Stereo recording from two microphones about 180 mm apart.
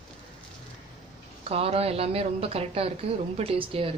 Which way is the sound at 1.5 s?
35° right (ahead or behind).